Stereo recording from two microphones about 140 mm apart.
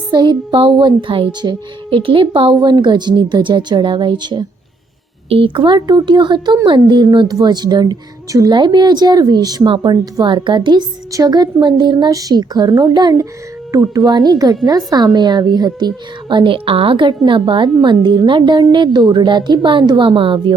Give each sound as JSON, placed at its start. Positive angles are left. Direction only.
{"t": 0.1, "sound": "a child's voice", "side_deg": -30}